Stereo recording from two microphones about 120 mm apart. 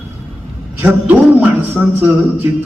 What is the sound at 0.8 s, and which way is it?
Speech, 15° right (ahead or behind).